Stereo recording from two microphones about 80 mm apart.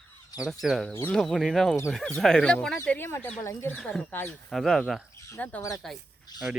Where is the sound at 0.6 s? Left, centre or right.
Centre.